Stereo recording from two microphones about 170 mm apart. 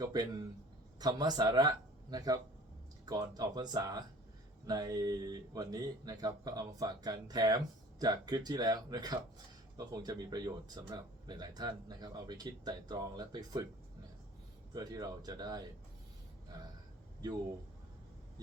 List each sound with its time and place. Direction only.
0.0 s speech: 25° right (ahead or behind)
14.7 s speech: 25° right (ahead or behind)